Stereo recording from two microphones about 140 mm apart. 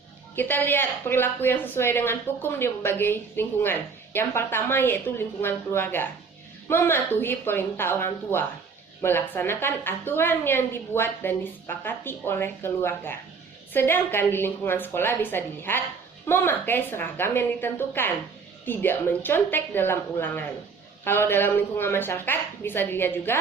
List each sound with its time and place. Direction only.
0.3 s a woman's voice: 15° left (ahead or behind)